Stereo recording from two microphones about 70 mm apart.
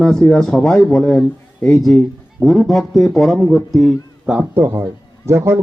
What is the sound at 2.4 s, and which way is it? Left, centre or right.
Speech, centre.